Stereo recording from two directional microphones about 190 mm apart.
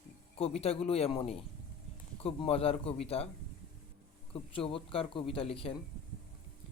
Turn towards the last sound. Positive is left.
turn(degrees=30)  # may be behind; listen again after turning